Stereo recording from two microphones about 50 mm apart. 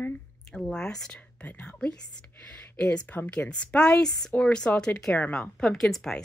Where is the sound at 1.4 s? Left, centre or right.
Left.